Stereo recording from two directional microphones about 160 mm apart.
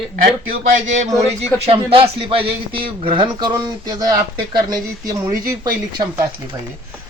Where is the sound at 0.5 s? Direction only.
50° right (ahead or behind).